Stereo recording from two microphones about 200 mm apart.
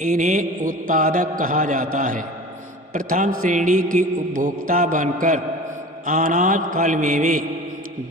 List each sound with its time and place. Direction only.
0.0 s a man's voice: 40° right (ahead or behind)